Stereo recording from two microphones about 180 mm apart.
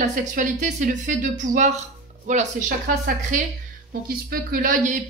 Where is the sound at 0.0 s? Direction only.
45° right (ahead or behind).